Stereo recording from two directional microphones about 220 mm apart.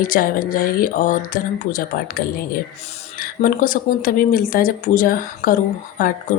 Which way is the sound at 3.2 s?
40° left (ahead or behind).